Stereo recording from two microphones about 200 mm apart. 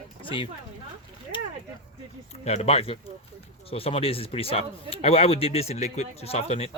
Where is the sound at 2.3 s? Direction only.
35° left (ahead or behind).